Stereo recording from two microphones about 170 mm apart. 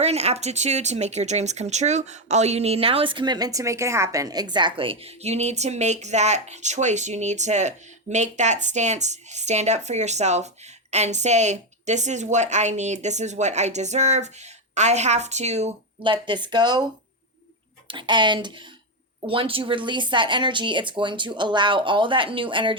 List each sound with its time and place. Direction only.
0.0 s a woman's voice: 40° right (ahead or behind)